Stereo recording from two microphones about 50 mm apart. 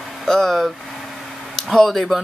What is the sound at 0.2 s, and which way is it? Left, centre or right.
Speech, centre.